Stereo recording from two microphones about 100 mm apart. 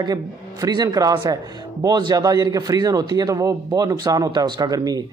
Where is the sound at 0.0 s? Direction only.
45° right (ahead or behind).